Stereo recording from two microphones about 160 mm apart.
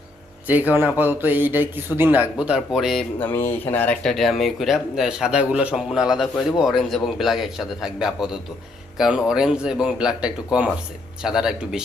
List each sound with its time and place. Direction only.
0.4 s a man's voice: 10° right (ahead or behind)
3.2 s speech: 15° left (ahead or behind); by 11.8 s 5° right (ahead or behind)